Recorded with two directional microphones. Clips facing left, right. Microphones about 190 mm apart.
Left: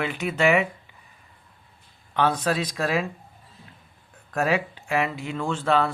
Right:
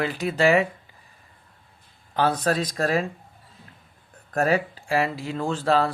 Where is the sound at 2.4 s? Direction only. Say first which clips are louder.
Right 2 dB; 40° right (ahead or behind).